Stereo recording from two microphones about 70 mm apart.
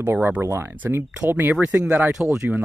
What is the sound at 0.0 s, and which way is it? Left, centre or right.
Speech, right.